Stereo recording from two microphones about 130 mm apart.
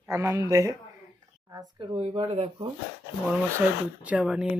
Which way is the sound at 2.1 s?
35° right (ahead or behind).